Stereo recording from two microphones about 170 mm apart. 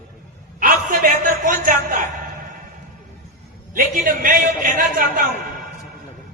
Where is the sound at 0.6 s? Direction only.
50° right (ahead or behind).